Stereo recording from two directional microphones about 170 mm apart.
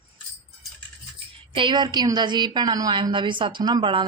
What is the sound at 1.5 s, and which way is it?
A woman's voice, 25° right (ahead or behind).